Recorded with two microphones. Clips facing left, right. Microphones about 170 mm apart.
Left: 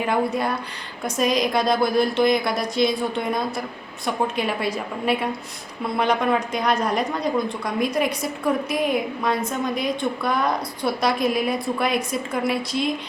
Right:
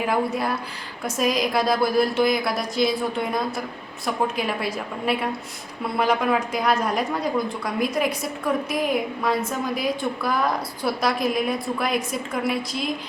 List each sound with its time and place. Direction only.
0.0 s a woman's voice: centre (ahead or behind)